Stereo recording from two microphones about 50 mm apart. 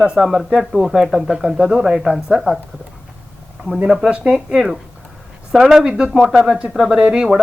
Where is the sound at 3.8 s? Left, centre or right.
Centre.